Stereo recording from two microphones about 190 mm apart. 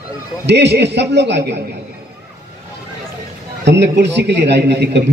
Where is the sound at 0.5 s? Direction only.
65° right (ahead or behind).